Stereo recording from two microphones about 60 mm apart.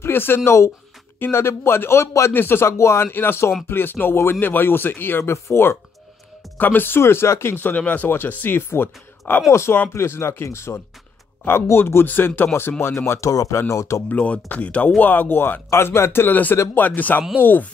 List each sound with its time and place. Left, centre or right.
0.0 s speech: left
2.3 s speech: left
12.8 s speech: left
13.3 s speech: left
14.0 s speech: left
15.7 s speech: left
16.7 s speech: left